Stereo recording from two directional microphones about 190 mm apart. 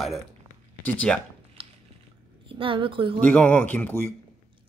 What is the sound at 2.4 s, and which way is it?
Speech, 25° right (ahead or behind).